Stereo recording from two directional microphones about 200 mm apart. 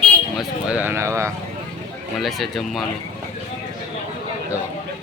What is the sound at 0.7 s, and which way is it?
Speech, 10° right (ahead or behind).